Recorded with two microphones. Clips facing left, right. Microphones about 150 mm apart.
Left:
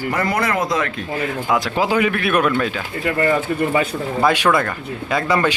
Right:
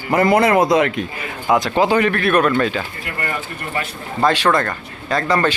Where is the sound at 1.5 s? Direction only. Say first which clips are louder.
Right 4 dB; 5° left (ahead or behind).